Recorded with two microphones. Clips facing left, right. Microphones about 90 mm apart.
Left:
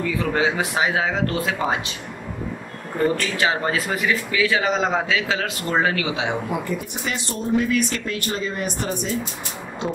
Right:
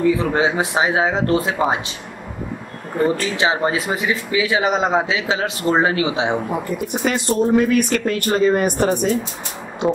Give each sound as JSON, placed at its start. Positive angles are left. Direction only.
{"t": 0.0, "sound": "speech", "side_deg": -25}
{"t": 3.3, "sound": "speech", "side_deg": -25}
{"t": 6.7, "sound": "speech", "side_deg": -55}